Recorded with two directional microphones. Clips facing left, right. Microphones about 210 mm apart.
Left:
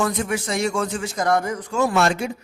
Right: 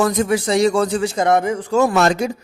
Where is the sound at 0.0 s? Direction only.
40° right (ahead or behind); by 1.5 s 25° right (ahead or behind).